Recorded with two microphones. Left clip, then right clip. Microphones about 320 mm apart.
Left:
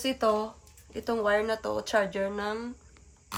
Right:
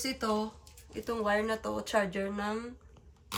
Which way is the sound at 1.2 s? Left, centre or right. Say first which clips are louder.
Left 4 dB; left.